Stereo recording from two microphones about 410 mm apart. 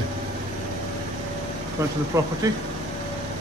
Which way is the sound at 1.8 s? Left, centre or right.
Centre.